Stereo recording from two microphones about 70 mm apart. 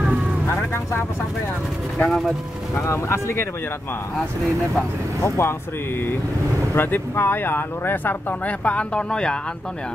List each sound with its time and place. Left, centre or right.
0.5 s vehicle: left
2.0 s speech: centre
2.7 s speech: left
5.2 s speech: left
6.7 s speech: left; by 9.4 s centre